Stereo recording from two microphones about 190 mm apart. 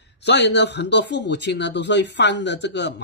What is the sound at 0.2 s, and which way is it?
Speech, 65° left (ahead or behind).